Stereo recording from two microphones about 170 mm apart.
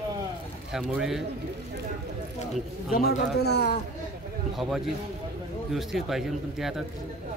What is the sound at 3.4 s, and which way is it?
Speech, 75° left (ahead or behind).